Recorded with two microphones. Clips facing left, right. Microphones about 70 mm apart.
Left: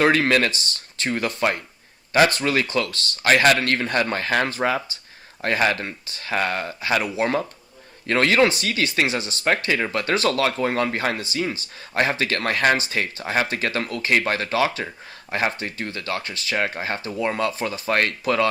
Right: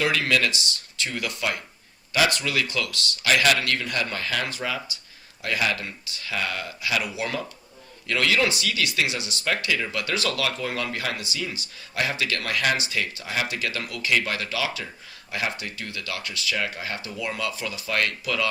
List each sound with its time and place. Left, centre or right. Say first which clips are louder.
0.0 s speech: left 5 dB; left